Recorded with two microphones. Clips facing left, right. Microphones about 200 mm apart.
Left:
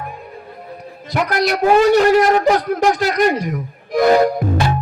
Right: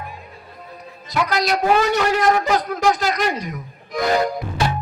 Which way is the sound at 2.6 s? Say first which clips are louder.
Left 3 dB; 55° left (ahead or behind).